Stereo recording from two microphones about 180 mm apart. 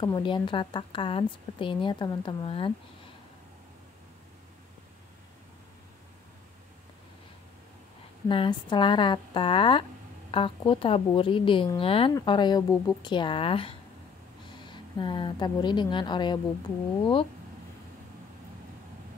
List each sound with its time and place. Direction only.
0.0 s a woman's voice: 25° left (ahead or behind)
8.3 s a woman's voice: 25° left (ahead or behind)